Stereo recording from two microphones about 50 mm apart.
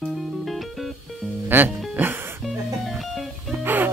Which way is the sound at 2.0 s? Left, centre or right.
Right.